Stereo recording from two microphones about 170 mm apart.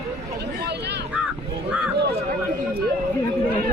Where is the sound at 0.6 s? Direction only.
80° right.